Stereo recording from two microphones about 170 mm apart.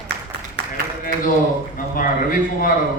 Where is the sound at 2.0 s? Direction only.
55° left (ahead or behind).